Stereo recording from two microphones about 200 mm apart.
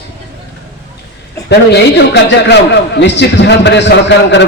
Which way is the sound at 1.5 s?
60° left (ahead or behind).